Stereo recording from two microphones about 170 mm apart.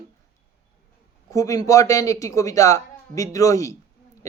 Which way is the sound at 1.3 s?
20° left (ahead or behind).